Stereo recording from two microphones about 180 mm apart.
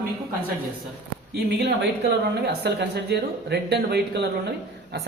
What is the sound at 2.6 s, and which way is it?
Speech, 65° right (ahead or behind).